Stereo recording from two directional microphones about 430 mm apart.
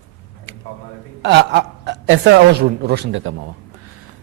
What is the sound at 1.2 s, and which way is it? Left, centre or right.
A man's voice, right.